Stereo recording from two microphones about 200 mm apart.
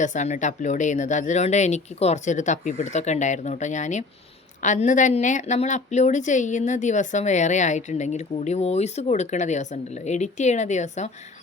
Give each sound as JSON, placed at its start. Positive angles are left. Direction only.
{"t": 0.0, "sound": "speech", "side_deg": 40}